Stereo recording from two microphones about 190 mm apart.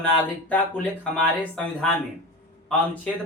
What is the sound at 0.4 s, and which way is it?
A man's voice, 10° left (ahead or behind).